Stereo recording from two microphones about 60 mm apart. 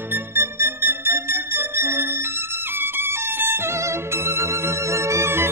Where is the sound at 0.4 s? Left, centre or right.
Right.